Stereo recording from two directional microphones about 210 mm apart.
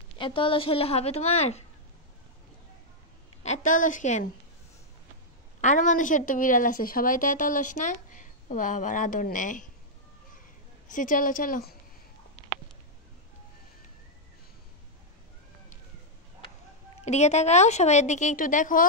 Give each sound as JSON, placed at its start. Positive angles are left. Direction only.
{"t": 0.2, "sound": "a woman's voice", "side_deg": 25}
{"t": 3.4, "sound": "speech", "side_deg": 35}
{"t": 5.6, "sound": "speech", "side_deg": 35}
{"t": 10.9, "sound": "speech", "side_deg": 40}
{"t": 17.0, "sound": "speech", "side_deg": 30}